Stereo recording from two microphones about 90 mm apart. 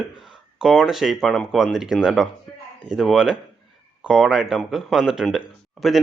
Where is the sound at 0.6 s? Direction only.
5° right (ahead or behind).